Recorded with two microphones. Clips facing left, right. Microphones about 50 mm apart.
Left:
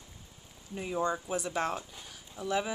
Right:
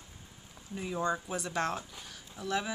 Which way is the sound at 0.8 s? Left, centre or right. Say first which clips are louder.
Left 1 dB; centre.